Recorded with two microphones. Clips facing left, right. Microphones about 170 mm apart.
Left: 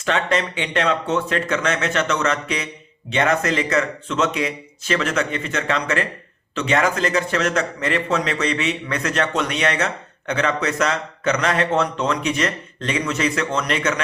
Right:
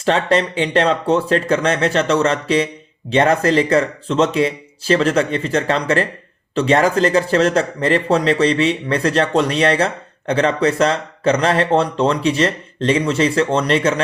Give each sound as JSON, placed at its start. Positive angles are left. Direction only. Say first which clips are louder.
{"t": 0.0, "sound": "a man's voice", "louder": "right 5 dB", "side_deg": -35}